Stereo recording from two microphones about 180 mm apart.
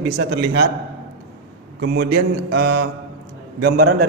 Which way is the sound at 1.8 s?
70° right (ahead or behind).